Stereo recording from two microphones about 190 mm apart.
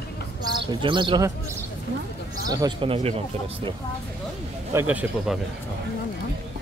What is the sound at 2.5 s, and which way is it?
Speech, 20° right (ahead or behind).